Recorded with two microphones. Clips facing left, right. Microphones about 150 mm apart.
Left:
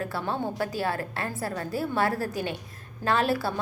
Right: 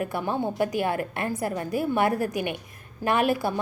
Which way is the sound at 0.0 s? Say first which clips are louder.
Right 3 dB; 15° right (ahead or behind).